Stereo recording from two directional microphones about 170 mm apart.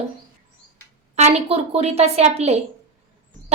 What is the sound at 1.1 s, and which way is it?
A woman's voice, 40° right (ahead or behind).